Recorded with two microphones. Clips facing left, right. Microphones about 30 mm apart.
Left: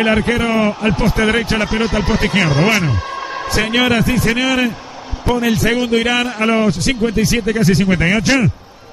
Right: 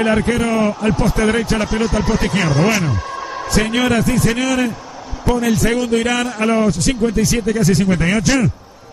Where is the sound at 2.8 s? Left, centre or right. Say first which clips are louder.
Left 1 dB; left.